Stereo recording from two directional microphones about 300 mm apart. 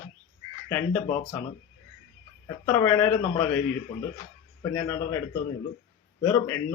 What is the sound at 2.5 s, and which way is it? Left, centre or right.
A man's voice, centre.